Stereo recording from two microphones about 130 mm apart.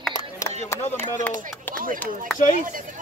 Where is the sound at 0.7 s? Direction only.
15° left (ahead or behind).